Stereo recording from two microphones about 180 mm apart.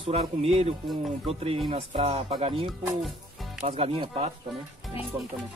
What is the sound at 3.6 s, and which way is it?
Speech, 35° right (ahead or behind).